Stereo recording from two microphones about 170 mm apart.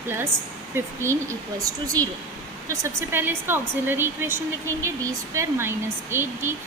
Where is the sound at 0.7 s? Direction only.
15° right (ahead or behind).